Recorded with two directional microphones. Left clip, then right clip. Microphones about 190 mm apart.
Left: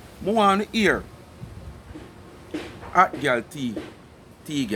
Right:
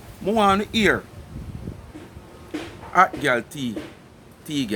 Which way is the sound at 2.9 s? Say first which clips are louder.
Right 1 dB; 10° right (ahead or behind).